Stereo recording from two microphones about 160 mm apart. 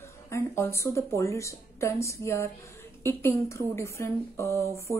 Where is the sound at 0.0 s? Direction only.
15° left (ahead or behind).